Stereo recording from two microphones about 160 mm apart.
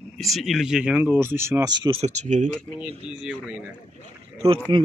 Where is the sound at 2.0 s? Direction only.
45° right (ahead or behind).